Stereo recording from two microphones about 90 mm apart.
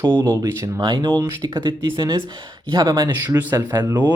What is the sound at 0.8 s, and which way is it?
Speech, 60° right (ahead or behind).